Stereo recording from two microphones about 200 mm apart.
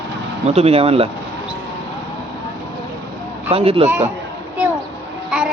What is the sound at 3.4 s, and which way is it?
Speech, 30° right (ahead or behind).